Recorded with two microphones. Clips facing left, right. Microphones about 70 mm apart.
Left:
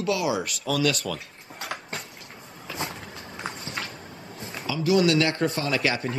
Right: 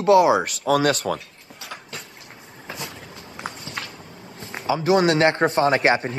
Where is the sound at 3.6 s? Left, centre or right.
Left.